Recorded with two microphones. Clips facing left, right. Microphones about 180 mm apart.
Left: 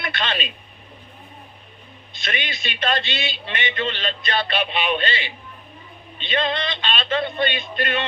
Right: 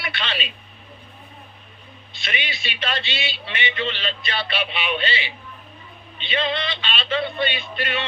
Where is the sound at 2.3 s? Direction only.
45° left (ahead or behind).